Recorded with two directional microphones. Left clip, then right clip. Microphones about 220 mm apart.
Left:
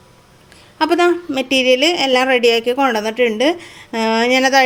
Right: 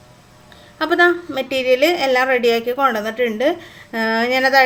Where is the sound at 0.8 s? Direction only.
30° left (ahead or behind).